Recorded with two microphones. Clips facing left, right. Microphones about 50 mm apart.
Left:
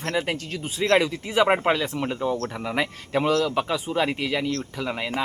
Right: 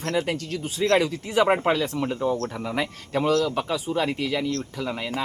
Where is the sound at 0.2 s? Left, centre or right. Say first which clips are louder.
Right 1 dB; left.